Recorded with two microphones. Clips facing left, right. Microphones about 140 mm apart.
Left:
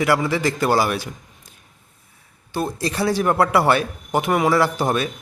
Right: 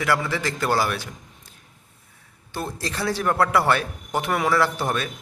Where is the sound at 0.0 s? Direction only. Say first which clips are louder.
Left 5 dB; 15° left (ahead or behind).